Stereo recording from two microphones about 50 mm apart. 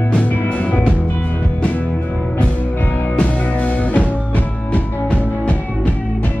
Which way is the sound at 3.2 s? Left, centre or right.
Left.